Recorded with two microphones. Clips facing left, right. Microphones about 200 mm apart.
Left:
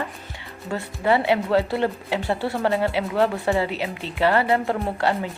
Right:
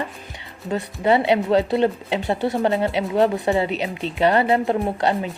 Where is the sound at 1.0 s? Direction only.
20° right (ahead or behind).